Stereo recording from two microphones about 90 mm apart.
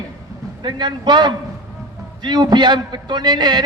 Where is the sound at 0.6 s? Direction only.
55° right (ahead or behind).